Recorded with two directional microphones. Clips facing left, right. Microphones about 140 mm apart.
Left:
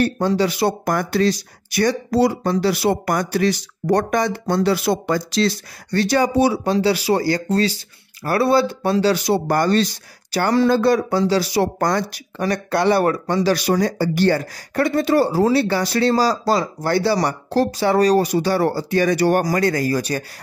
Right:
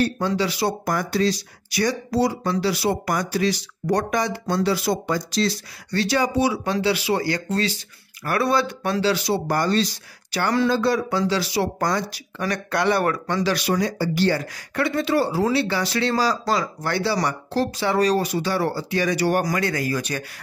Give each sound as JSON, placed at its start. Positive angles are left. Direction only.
{"t": 0.0, "sound": "speech", "side_deg": 50}
{"t": 5.9, "sound": "speech", "side_deg": 45}
{"t": 9.0, "sound": "speech", "side_deg": 45}
{"t": 10.3, "sound": "speech", "side_deg": 40}
{"t": 10.7, "sound": "speech", "side_deg": 50}
{"t": 12.4, "sound": "speech", "side_deg": 30}